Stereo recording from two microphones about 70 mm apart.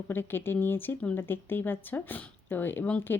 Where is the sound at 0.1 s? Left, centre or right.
Left.